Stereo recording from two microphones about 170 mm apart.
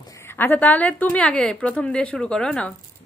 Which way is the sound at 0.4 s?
10° left (ahead or behind).